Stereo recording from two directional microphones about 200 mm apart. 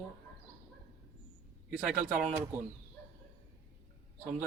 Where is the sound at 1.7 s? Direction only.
5° right (ahead or behind).